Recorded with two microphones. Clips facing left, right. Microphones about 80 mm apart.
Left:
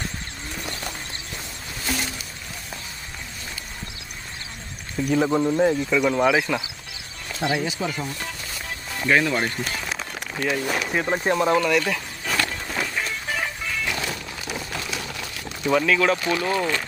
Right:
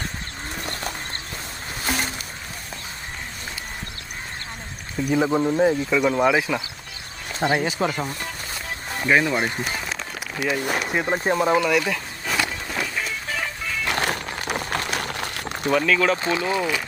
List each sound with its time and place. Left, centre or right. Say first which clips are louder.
0.5 s clip-clop: right 1 dB; right
1.8 s boat: right 2 dB; right
5.1 s speech: even; centre
7.3 s speech: right 3 dB; right
9.0 s speech: right 1 dB; centre
9.8 s speech: even; centre
11.5 s a sound: even; centre
13.8 s crumpling: right 4 dB; right
15.9 s speech: even; centre
16.1 s speech: even; right
16.4 s speech: even; centre